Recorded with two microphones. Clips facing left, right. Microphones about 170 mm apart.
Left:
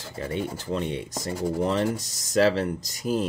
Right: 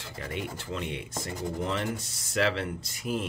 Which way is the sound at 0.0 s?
35° left (ahead or behind).